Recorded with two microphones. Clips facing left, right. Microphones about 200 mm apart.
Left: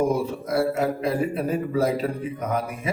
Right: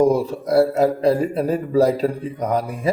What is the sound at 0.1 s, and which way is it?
A man's voice, 35° right (ahead or behind).